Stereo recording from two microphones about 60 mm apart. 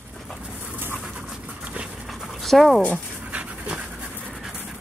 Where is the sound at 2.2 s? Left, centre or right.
Centre.